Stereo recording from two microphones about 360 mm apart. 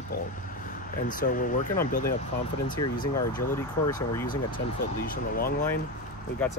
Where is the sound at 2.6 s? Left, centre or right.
Centre.